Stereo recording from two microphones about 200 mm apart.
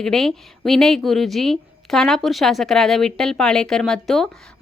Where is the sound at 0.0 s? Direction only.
Centre (ahead or behind).